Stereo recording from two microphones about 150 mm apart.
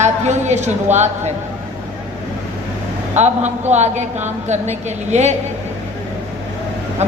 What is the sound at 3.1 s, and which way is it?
A woman's voice, 50° right (ahead or behind).